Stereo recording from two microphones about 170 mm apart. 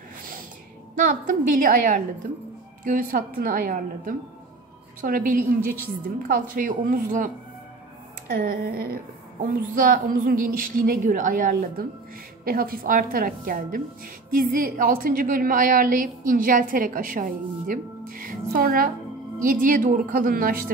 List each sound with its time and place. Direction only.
0.9 s a woman's voice: 55° right (ahead or behind)
8.3 s a woman's voice: 60° right (ahead or behind)